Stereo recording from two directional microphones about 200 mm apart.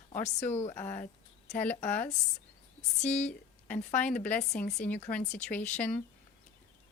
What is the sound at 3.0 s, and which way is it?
Speech, 35° left (ahead or behind).